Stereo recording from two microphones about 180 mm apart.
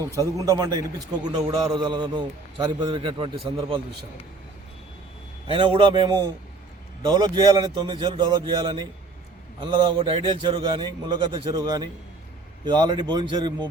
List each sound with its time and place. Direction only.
0.0 s a man's voice: 20° right (ahead or behind)
5.5 s a man's voice: 30° right (ahead or behind)